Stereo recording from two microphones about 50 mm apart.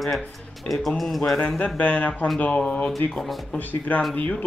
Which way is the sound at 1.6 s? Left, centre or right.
Left.